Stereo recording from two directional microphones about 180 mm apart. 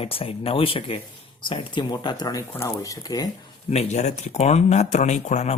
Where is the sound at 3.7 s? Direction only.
35° left (ahead or behind).